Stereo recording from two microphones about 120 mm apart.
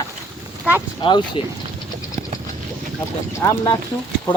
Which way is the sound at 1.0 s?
40° left (ahead or behind).